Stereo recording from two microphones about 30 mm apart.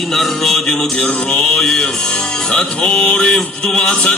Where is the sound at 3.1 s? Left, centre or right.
Left.